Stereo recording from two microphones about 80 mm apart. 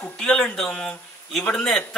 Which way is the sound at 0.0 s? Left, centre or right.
Centre.